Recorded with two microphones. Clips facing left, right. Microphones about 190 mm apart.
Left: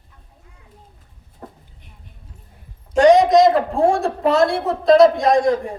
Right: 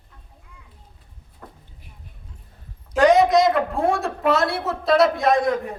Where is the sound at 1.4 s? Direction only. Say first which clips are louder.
Left 5 dB; 30° left (ahead or behind).